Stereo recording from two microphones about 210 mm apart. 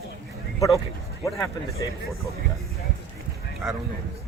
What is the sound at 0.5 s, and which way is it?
Speech, 15° left (ahead or behind).